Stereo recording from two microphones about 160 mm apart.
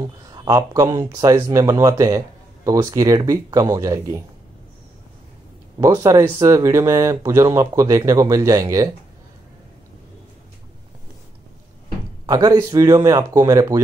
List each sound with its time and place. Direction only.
0.0 s speech: 25° right (ahead or behind)
5.8 s speech: 20° right (ahead or behind)
12.3 s speech: 25° right (ahead or behind)